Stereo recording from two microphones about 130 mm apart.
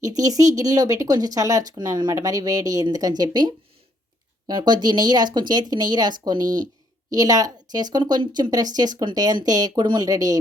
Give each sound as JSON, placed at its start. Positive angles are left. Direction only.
{"t": 0.0, "sound": "speech", "side_deg": -25}